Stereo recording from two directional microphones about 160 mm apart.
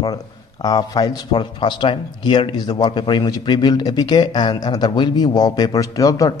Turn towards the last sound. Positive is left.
turn(degrees=20)  # may be behind; listen again after turning